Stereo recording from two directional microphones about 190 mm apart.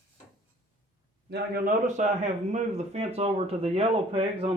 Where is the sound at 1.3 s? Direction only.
55° right (ahead or behind).